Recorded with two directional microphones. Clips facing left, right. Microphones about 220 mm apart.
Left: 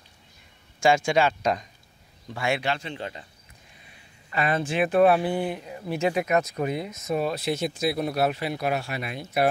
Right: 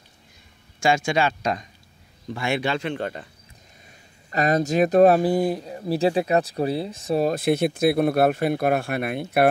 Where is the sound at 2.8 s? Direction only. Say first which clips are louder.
Right 7 dB; 60° right (ahead or behind).